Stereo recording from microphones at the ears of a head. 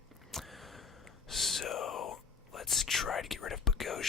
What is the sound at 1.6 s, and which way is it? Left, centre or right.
Whispering, left.